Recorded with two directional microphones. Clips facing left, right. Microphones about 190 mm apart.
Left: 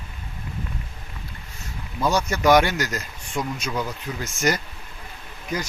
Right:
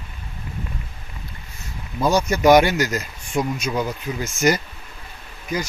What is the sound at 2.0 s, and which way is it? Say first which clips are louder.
Speech: right 4 dB; 15° right (ahead or behind).